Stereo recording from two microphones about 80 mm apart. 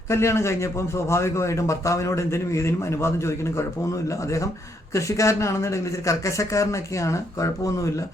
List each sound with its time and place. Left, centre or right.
0.1 s a man's voice: left
4.9 s a man's voice: left